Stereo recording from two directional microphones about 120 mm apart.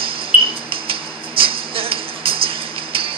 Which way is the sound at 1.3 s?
50° right (ahead or behind).